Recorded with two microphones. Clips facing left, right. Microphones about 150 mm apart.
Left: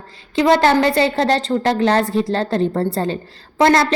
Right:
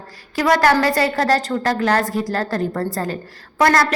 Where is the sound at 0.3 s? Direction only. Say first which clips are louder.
Left 2 dB; 25° left (ahead or behind).